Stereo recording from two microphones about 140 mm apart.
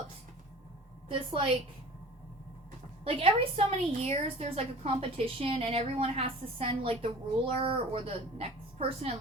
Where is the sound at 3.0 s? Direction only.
45° right (ahead or behind).